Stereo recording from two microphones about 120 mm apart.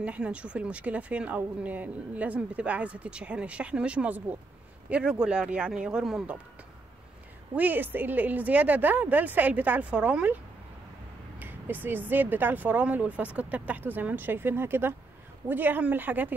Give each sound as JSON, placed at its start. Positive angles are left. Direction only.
{"t": 0.0, "sound": "speech", "side_deg": -10}
{"t": 7.5, "sound": "speech", "side_deg": -15}